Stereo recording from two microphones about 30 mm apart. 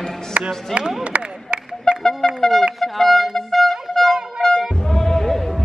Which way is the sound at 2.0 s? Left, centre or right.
Centre.